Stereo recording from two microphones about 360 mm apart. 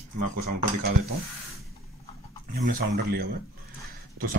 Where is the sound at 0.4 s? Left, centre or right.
Right.